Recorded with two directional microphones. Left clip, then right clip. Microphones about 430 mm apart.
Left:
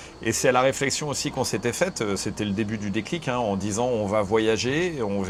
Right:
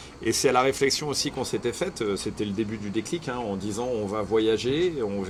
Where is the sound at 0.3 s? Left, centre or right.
Centre.